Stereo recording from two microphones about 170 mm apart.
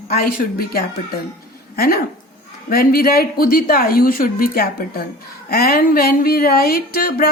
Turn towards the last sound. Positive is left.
turn(degrees=65)  # may be behind; listen again after turning